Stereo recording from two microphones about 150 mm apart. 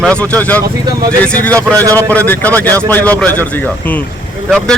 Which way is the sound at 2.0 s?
10° left (ahead or behind).